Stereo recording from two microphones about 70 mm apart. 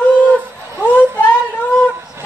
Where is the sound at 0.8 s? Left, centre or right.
Left.